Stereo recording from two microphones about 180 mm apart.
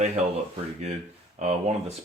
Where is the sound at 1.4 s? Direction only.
35° right (ahead or behind).